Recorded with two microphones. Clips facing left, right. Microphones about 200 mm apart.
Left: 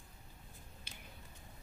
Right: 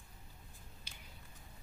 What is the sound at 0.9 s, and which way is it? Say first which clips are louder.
Tick-tock: left 4 dB; 55° left (ahead or behind).